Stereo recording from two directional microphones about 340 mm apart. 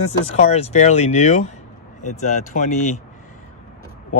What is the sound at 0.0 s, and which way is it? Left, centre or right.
Speech, centre.